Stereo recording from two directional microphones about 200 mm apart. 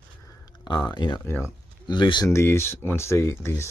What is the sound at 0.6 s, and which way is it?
Speech, 20° left (ahead or behind).